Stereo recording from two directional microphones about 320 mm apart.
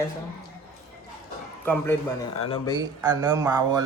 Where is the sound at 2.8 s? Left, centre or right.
Centre.